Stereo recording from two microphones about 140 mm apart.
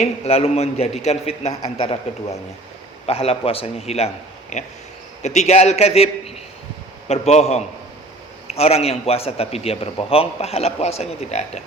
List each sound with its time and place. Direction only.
0.0 s a man's voice: 45° left (ahead or behind)
3.1 s a man's voice: 45° left (ahead or behind)